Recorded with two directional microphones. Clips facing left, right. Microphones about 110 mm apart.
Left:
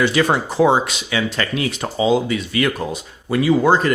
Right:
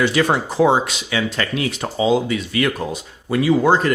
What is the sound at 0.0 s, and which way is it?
Speech, 15° left (ahead or behind).